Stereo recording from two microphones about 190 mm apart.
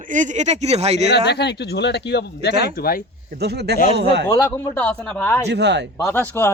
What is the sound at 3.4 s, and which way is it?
Speech, 60° right (ahead or behind).